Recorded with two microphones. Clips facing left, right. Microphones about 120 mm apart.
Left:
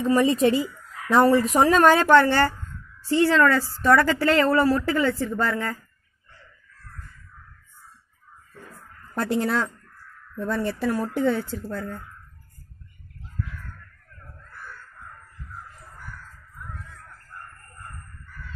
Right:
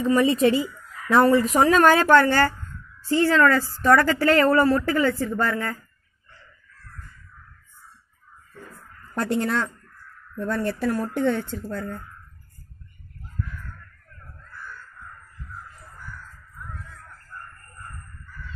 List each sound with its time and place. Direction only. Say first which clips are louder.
0.0 s a woman's voice: even; centre (ahead or behind)
9.1 s a woman's voice: even; centre (ahead or behind)